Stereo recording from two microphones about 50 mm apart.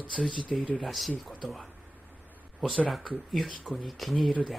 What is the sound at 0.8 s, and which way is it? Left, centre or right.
Speech, centre.